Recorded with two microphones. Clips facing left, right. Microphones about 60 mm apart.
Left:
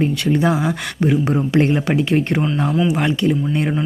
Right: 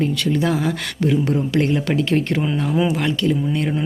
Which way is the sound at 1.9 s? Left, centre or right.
Centre.